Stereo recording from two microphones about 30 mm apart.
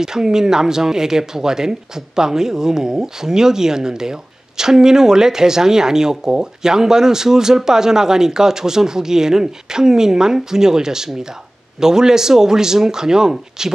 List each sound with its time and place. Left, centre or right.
0.0 s speech: centre